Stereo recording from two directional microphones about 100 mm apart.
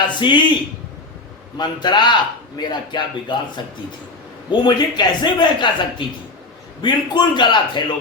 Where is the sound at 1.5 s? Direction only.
50° left (ahead or behind).